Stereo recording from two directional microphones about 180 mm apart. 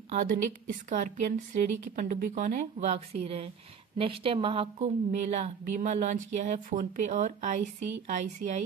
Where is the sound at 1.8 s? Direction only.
50° right (ahead or behind).